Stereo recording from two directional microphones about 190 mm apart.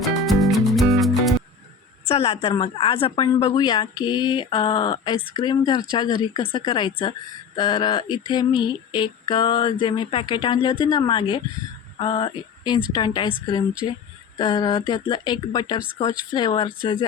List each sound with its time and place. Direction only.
0.0 s music: centre (ahead or behind)
2.0 s female singing: 30° left (ahead or behind)